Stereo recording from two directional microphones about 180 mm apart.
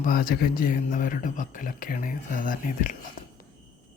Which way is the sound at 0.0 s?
55° left (ahead or behind).